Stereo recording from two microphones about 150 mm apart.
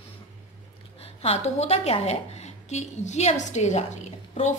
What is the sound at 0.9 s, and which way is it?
A woman's voice, 40° left (ahead or behind).